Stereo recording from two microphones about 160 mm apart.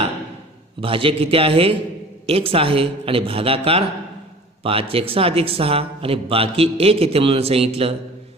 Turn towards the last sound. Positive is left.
turn(degrees=-40)  # may be behind; listen again after turning